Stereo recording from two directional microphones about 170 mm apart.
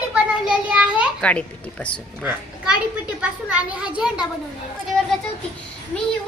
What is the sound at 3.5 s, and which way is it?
Speech, 5° right (ahead or behind).